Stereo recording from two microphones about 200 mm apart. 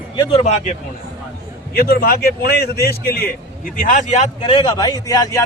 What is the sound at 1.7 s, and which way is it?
A man's voice, 50° left (ahead or behind).